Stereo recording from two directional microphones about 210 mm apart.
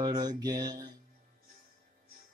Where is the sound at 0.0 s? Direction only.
20° right (ahead or behind).